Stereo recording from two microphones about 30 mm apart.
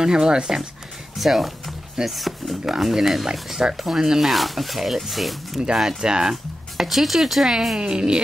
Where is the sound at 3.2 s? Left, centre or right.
Right.